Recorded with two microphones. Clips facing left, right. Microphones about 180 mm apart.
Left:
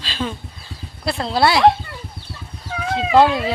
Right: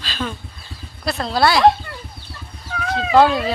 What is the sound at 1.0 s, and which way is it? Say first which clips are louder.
Speech: even; 25° left (ahead or behind).